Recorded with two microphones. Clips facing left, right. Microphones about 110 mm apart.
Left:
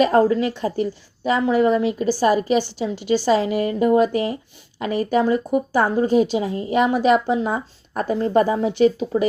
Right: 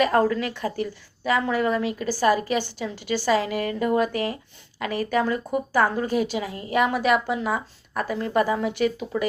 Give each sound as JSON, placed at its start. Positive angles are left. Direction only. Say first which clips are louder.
{"t": 0.0, "sound": "speech", "louder": "left 4 dB", "side_deg": 25}